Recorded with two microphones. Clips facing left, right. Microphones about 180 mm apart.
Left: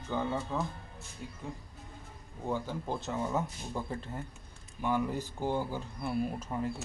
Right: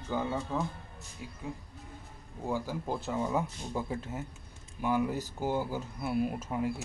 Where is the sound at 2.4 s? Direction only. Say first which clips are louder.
Right 1 dB; 10° right (ahead or behind).